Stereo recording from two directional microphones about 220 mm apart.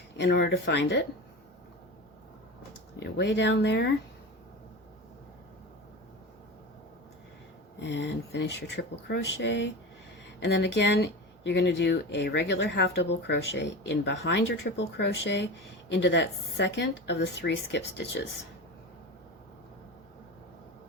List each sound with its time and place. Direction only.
0.2 s speech: 50° left (ahead or behind)
3.0 s speech: 55° left (ahead or behind)
7.8 s speech: 55° left (ahead or behind)